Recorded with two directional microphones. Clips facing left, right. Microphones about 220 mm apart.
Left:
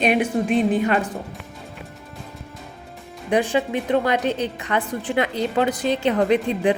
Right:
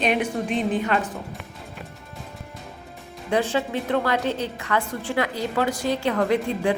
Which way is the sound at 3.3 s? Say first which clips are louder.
Left 3 dB; 15° left (ahead or behind).